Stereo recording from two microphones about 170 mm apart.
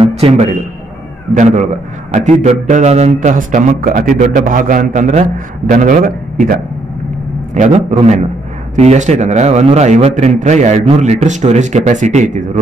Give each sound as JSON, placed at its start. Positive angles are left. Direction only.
{"t": 0.0, "sound": "a sound", "side_deg": -40}
{"t": 1.3, "sound": "a man's voice", "side_deg": -45}
{"t": 7.9, "sound": "a man's voice", "side_deg": -40}